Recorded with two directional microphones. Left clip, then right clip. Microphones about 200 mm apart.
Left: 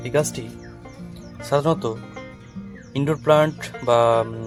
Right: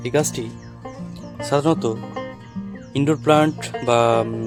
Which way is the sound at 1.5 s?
50° right (ahead or behind).